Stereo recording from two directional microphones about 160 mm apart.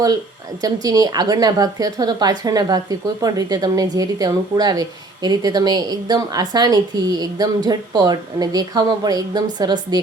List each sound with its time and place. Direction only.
0.6 s a woman's voice: 25° right (ahead or behind)